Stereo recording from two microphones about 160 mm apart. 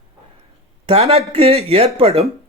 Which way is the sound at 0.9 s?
40° right (ahead or behind).